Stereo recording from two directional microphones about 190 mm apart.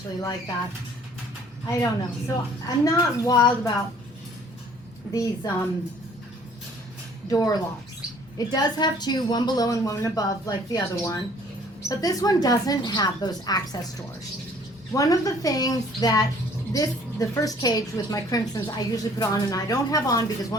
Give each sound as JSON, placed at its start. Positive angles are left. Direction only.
{"t": 0.2, "sound": "a woman's voice", "side_deg": 15}
{"t": 1.6, "sound": "a woman's voice", "side_deg": 20}
{"t": 5.1, "sound": "a woman's voice", "side_deg": 15}
{"t": 7.3, "sound": "a woman's voice", "side_deg": 20}
{"t": 14.9, "sound": "a woman's voice", "side_deg": 20}